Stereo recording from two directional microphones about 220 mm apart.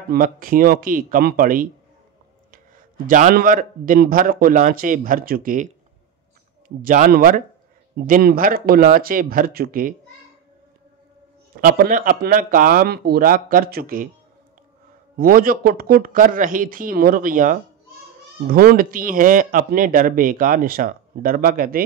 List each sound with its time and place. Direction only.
0.1 s a man's voice: 40° right (ahead or behind)
3.1 s a man's voice: 35° right (ahead or behind)
6.8 s a man's voice: 40° right (ahead or behind)
11.5 s a man's voice: 40° right (ahead or behind)
15.1 s a man's voice: 40° right (ahead or behind)